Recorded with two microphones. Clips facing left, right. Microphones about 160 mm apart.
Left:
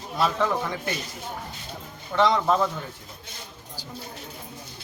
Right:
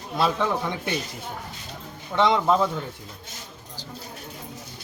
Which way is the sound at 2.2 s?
15° right (ahead or behind).